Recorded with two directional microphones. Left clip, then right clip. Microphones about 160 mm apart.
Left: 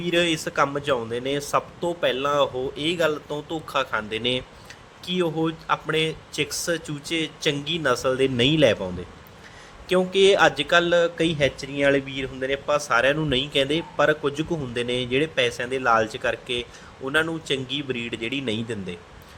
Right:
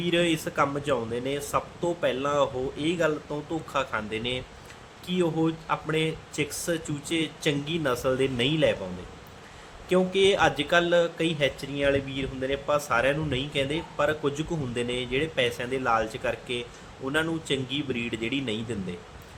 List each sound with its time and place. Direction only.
0.0 s speech: 25° left (ahead or behind)
9.9 s a man's voice: 30° left (ahead or behind)